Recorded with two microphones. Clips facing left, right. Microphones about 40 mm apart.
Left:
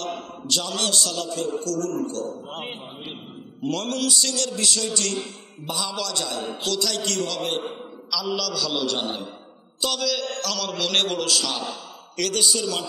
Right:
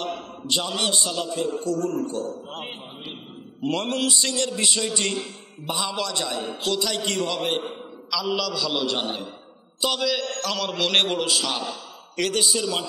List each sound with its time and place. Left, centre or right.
0.5 s a man's voice: right
2.2 s a man's voice: centre
3.6 s a man's voice: right; by 9.3 s centre
9.8 s a man's voice: centre